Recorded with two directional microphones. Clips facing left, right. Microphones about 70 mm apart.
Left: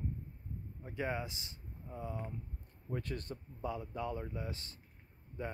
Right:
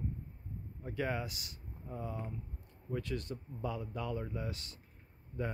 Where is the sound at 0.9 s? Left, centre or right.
Centre.